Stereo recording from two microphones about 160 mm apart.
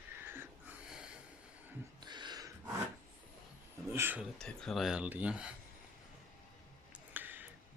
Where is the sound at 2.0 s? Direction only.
25° right (ahead or behind).